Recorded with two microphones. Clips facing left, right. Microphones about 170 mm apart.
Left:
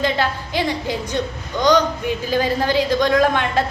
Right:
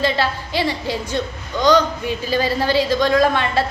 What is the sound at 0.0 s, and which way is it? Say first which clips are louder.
A woman's voice: even; 15° left (ahead or behind).